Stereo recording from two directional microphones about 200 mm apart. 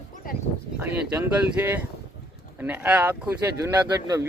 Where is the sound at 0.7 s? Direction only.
10° right (ahead or behind).